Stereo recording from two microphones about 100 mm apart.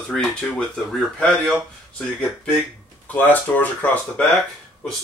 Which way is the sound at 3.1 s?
15° left (ahead or behind).